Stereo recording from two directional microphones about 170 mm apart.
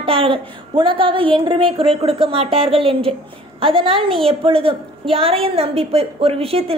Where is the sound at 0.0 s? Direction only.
30° right (ahead or behind).